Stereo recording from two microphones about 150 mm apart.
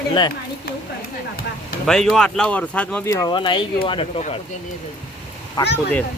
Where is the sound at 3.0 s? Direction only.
20° left (ahead or behind).